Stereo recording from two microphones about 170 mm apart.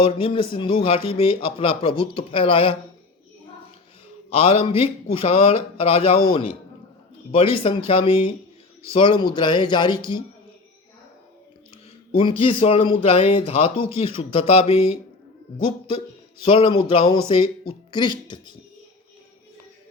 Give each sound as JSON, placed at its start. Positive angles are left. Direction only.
{"t": 0.0, "sound": "speech", "side_deg": 30}
{"t": 4.3, "sound": "speech", "side_deg": 35}
{"t": 7.3, "sound": "speech", "side_deg": 35}
{"t": 12.1, "sound": "speech", "side_deg": 30}
{"t": 16.4, "sound": "speech", "side_deg": 35}